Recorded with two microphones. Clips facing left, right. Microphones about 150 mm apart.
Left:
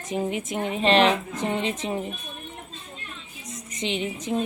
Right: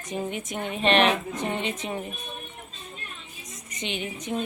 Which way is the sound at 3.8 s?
30° left (ahead or behind).